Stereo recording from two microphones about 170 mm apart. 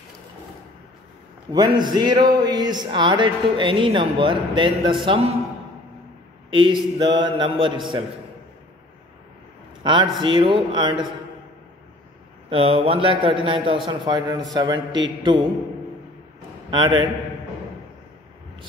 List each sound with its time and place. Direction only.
1.5 s a man's voice: 25° right (ahead or behind)
6.5 s speech: 30° right (ahead or behind)
9.8 s speech: 25° right (ahead or behind)
12.4 s a man's voice: 35° right (ahead or behind)
16.7 s speech: 25° right (ahead or behind)